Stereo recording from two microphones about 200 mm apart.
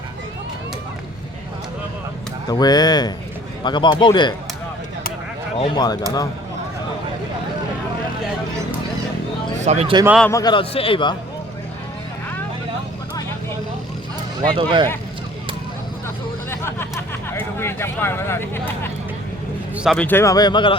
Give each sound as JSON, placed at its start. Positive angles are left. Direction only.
{"t": 2.5, "sound": "a man's voice", "side_deg": 20}
{"t": 5.5, "sound": "a man's voice", "side_deg": 20}
{"t": 9.6, "sound": "speech", "side_deg": -30}
{"t": 10.2, "sound": "a man's voice", "side_deg": 15}
{"t": 14.5, "sound": "speech", "side_deg": -25}
{"t": 16.5, "sound": "a sound", "side_deg": 10}
{"t": 17.3, "sound": "speech", "side_deg": 10}
{"t": 19.7, "sound": "speech", "side_deg": 0}